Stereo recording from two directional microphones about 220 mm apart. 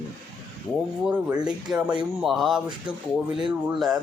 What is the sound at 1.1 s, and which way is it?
Speech, 5° right (ahead or behind).